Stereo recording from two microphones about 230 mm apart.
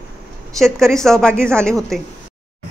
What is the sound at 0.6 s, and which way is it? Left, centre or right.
A man's voice, centre.